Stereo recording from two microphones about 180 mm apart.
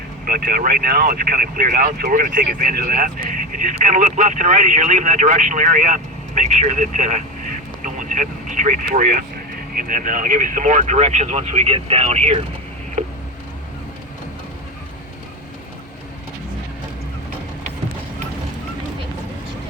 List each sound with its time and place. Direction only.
0.3 s speech: 55° right (ahead or behind); by 12.4 s 35° right (ahead or behind)